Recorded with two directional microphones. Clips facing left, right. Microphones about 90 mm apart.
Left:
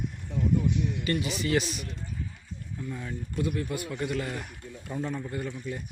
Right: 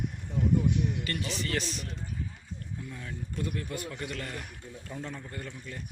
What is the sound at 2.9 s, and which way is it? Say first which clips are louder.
Speech: left 4 dB; 10° left (ahead or behind).